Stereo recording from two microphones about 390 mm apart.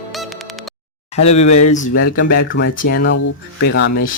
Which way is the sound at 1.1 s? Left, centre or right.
Centre.